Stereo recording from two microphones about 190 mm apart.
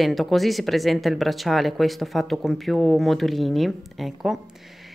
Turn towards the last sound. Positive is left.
turn(degrees=0)  # may be behind; listen again after turning